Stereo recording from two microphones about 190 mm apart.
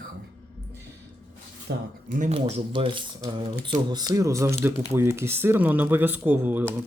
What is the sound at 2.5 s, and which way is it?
Speech, 25° right (ahead or behind).